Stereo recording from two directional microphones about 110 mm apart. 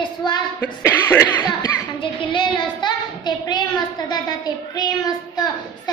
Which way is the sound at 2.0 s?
50° left (ahead or behind).